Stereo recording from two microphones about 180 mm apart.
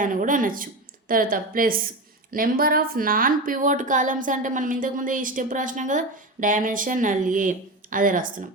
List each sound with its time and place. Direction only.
0.0 s a woman's voice: 50° right (ahead or behind)